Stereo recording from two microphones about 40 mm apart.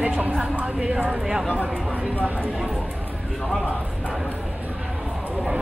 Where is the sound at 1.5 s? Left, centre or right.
Right.